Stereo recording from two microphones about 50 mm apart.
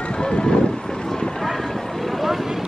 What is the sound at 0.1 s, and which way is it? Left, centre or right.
Vehicle, centre.